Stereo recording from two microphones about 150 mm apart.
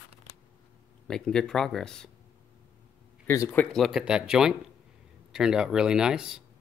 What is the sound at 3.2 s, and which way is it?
Speech, 15° left (ahead or behind).